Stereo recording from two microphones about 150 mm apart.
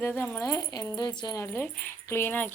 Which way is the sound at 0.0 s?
15° left (ahead or behind).